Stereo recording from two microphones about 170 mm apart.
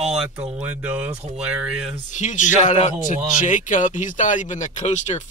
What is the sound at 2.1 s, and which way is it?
Speech, 45° left (ahead or behind).